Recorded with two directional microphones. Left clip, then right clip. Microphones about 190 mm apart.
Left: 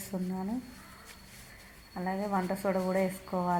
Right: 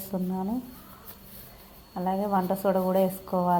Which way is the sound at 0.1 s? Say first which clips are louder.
Right 6 dB; 5° right (ahead or behind).